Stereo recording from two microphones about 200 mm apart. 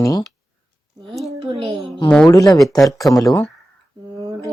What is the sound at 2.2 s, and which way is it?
Speech, 15° left (ahead or behind).